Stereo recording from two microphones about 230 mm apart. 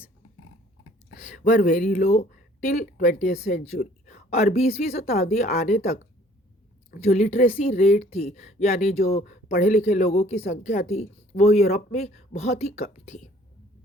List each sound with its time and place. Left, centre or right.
1.1 s speech: left
7.0 s speech: left